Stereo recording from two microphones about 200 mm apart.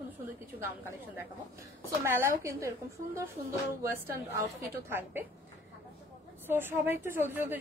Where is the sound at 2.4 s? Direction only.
15° right (ahead or behind).